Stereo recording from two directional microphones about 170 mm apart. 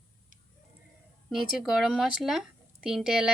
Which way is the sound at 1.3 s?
Centre (ahead or behind).